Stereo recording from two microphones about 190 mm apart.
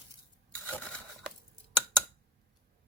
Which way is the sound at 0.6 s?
10° left (ahead or behind).